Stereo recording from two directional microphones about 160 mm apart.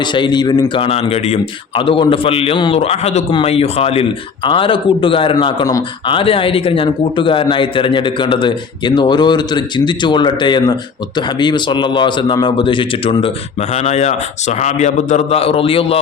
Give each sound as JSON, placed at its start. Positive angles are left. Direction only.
{"t": 0.0, "sound": "a man's voice", "side_deg": 30}